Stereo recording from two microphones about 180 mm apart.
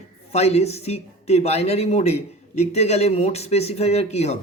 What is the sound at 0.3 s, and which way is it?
Speech, 35° left (ahead or behind).